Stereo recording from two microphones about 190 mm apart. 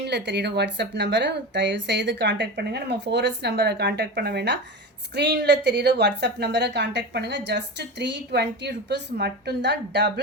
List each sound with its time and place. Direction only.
0.0 s a woman's voice: 65° right (ahead or behind)